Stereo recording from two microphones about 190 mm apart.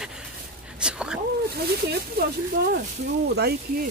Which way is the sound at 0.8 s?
5° right (ahead or behind).